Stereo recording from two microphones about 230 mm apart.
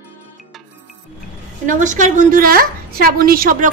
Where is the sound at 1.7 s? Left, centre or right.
Right.